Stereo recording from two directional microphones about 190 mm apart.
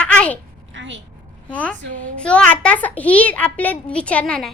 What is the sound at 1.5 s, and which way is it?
A child's voice, 5° left (ahead or behind).